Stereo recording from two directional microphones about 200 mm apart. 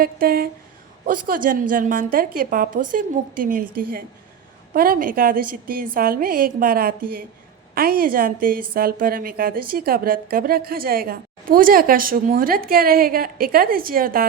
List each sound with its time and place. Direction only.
0.0 s a woman's voice: 50° right (ahead or behind)